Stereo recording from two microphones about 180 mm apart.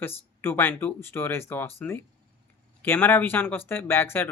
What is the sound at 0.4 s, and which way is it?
Speech, 10° left (ahead or behind).